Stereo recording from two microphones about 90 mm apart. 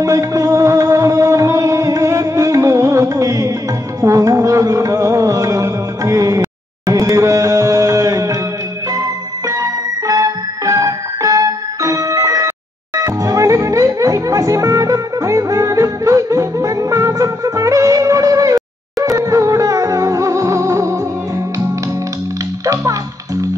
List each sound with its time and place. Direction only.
0.0 s music: 40° right (ahead or behind)
9.5 s music: 40° right (ahead or behind)
22.7 s music: 40° right (ahead or behind)